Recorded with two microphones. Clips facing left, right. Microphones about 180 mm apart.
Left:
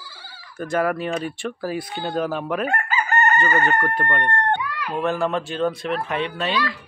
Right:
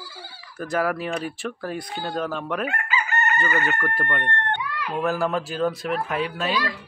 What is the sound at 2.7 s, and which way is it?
Chicken, 45° left (ahead or behind).